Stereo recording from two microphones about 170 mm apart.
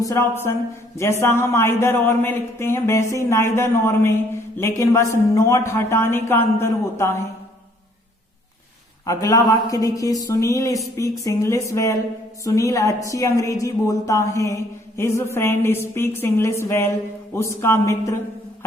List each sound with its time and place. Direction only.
0.0 s speech: 15° left (ahead or behind)
9.0 s music: 20° left (ahead or behind)
11.2 s speech: 20° left (ahead or behind)